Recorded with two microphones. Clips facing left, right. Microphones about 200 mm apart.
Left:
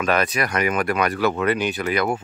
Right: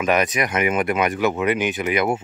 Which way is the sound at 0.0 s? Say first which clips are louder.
Right 1 dB; 15° right (ahead or behind).